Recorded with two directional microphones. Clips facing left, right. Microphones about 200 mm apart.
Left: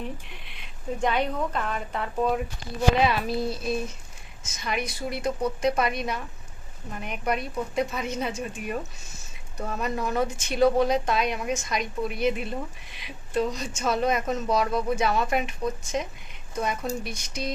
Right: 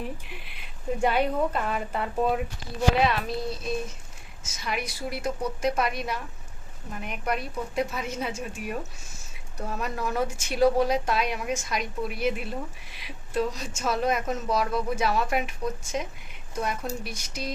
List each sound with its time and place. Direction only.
0.0 s a woman's voice: 5° right (ahead or behind)